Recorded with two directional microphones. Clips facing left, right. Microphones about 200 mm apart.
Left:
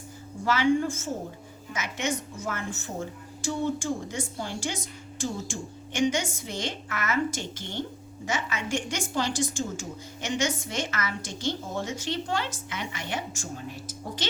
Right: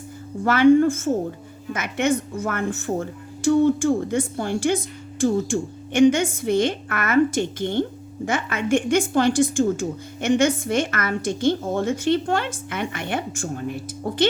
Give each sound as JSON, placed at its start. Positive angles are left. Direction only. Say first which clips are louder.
{"t": 0.4, "sound": "a woman's voice", "louder": "right 9 dB", "side_deg": -55}